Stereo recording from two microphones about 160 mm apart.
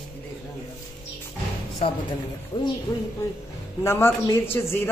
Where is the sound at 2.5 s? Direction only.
25° left (ahead or behind).